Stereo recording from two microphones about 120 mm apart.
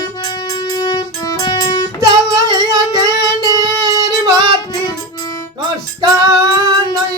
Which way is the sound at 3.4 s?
30° right (ahead or behind).